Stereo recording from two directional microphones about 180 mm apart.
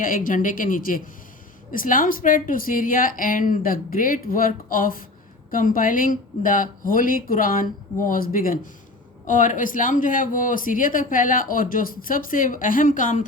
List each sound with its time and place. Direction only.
0.0 s speech: 50° left (ahead or behind)